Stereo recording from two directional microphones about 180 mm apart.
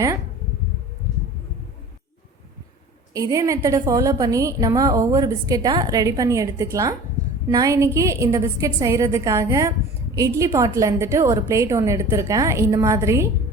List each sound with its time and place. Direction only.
3.1 s a woman's voice: 20° right (ahead or behind)